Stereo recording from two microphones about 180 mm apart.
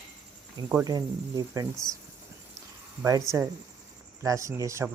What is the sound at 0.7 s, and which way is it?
Speech, 15° right (ahead or behind).